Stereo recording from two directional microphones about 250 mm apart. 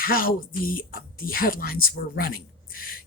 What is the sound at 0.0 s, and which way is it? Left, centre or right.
Speech, left.